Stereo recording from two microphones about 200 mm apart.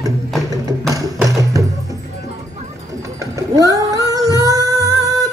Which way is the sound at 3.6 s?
15° right (ahead or behind).